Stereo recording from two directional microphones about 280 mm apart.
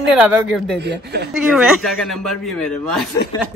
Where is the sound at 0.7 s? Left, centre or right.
Right.